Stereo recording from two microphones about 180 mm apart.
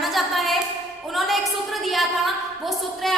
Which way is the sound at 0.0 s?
Centre (ahead or behind).